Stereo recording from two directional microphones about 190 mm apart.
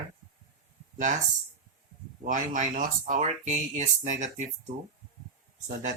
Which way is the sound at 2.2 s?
40° right (ahead or behind).